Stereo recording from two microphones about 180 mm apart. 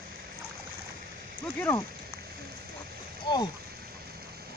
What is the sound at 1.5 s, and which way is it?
Speech, 15° left (ahead or behind).